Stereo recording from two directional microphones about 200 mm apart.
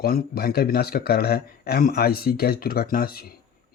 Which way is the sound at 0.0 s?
50° left (ahead or behind).